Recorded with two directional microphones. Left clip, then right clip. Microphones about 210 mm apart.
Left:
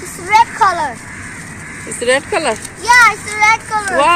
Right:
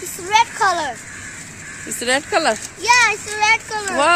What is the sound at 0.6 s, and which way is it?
Speech, 30° right (ahead or behind).